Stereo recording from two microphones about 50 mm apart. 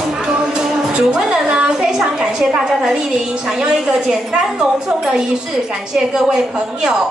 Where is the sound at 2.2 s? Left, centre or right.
Centre.